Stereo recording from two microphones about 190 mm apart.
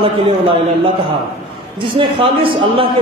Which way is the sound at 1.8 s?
25° right (ahead or behind).